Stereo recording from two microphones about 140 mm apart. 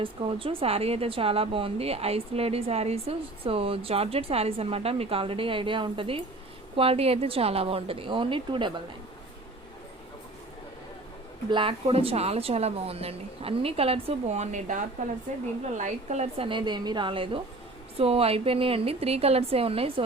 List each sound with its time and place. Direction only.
0.0 s speech: 40° right (ahead or behind)
11.5 s speech: 40° right (ahead or behind); by 14.8 s 55° right (ahead or behind)
15.8 s speech: 55° right (ahead or behind)
16.5 s a woman's voice: 35° right (ahead or behind)